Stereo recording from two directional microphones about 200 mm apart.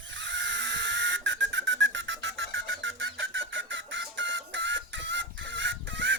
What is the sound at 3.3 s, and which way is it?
Chicken, 70° right (ahead or behind).